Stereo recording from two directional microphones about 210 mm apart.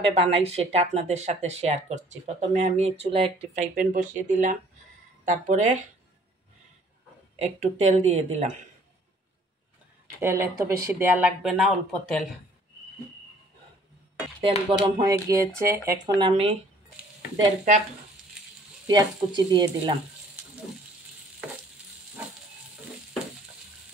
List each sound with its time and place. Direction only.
0.1 s speech: 30° right (ahead or behind)
7.3 s speech: 30° right (ahead or behind)
10.2 s speech: 10° right (ahead or behind)
14.7 s speech: 20° right (ahead or behind)
16.2 s speech: 25° right (ahead or behind)
18.9 s speech: 20° right (ahead or behind)